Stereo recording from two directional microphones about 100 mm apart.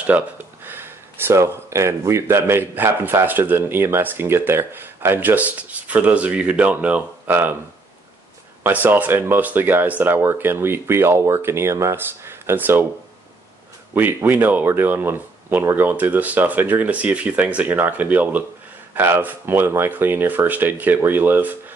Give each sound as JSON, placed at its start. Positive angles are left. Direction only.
{"t": 0.0, "sound": "speech", "side_deg": -15}
{"t": 8.6, "sound": "speech", "side_deg": -15}
{"t": 13.9, "sound": "speech", "side_deg": -15}